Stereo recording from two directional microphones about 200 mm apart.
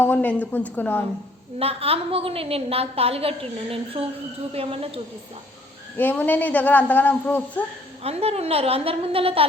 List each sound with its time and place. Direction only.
0.0 s speech: 10° left (ahead or behind)
1.5 s a woman's voice: 30° right (ahead or behind)
6.0 s speech: 10° left (ahead or behind)
8.0 s a woman's voice: 30° right (ahead or behind)